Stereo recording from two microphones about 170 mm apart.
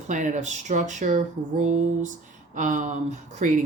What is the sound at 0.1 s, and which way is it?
Speech, 45° right (ahead or behind).